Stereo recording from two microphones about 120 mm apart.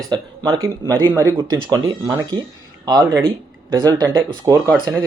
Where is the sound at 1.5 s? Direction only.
35° right (ahead or behind).